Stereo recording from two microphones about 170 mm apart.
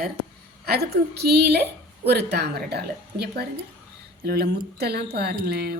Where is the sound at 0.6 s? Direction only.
65° right (ahead or behind).